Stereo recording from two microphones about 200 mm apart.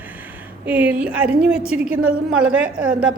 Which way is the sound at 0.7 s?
10° right (ahead or behind).